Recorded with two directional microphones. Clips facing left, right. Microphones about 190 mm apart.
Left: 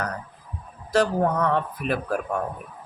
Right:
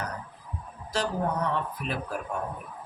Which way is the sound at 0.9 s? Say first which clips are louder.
Left 7 dB; 60° left (ahead or behind).